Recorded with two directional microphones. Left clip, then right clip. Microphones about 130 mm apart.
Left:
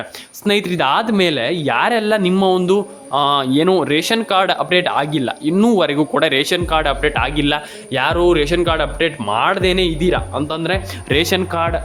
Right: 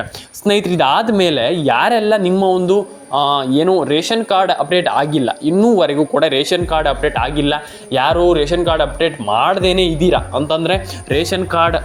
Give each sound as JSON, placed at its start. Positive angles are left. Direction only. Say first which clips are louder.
{"t": 0.4, "sound": "a man's voice", "louder": "right 3 dB", "side_deg": -5}
{"t": 2.3, "sound": "a man's voice", "louder": "right 1 dB", "side_deg": 15}
{"t": 8.2, "sound": "a man's voice", "louder": "right 1 dB", "side_deg": 15}
{"t": 11.1, "sound": "speech", "louder": "left 1 dB", "side_deg": 15}
{"t": 11.5, "sound": "speech", "louder": "right 9 dB", "side_deg": -25}